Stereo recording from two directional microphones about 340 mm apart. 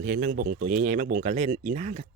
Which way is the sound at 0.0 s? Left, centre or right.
Right.